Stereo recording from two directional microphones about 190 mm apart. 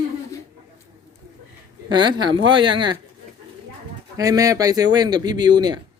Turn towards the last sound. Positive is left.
turn(degrees=-20)  # may be behind; listen again after turning